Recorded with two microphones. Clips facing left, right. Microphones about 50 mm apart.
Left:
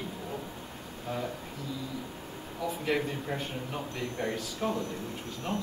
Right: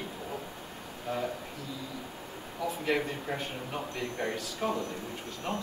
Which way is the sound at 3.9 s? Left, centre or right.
Right.